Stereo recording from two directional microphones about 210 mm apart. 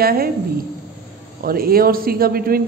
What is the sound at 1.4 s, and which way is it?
A man's voice, 45° right (ahead or behind).